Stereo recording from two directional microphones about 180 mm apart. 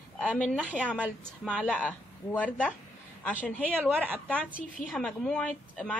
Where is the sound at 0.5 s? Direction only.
10° right (ahead or behind).